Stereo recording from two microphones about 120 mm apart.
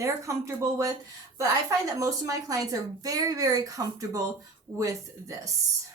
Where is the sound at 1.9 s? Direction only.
25° right (ahead or behind).